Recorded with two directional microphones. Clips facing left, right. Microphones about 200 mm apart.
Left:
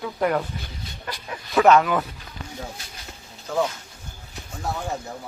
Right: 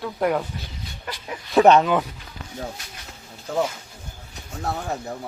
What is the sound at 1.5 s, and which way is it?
Speech, 25° right (ahead or behind).